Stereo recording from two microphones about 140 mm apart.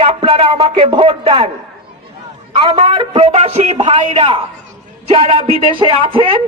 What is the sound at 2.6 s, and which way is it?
A man's voice, 35° right (ahead or behind).